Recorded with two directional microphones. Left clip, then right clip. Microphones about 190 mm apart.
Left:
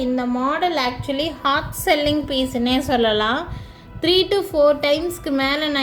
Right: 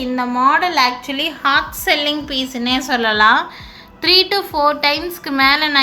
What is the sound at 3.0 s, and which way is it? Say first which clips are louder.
Speech: right 9 dB; 50° left (ahead or behind).